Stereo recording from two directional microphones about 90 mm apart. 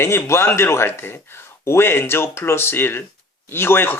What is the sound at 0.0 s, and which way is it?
Speech, 25° left (ahead or behind).